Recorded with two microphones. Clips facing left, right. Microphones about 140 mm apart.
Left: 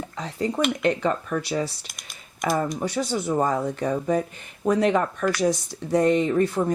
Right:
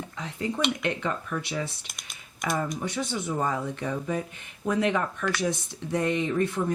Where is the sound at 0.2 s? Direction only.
35° left (ahead or behind).